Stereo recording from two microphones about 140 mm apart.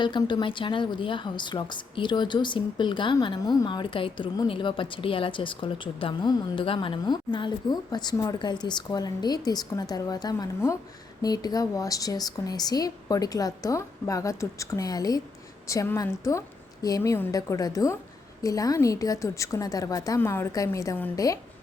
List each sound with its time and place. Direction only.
0.0 s a woman's voice: 35° left (ahead or behind)